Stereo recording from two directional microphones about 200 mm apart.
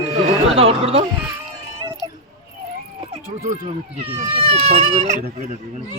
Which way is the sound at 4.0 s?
25° right (ahead or behind).